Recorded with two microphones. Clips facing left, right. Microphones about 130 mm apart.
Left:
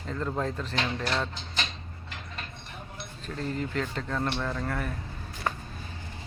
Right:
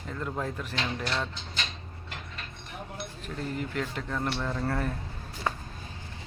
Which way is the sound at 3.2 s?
10° right (ahead or behind).